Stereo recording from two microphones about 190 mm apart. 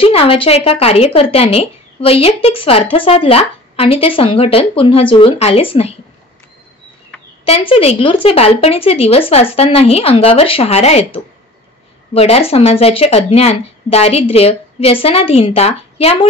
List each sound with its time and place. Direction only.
0.0 s speech: 30° left (ahead or behind)
7.4 s speech: 30° left (ahead or behind)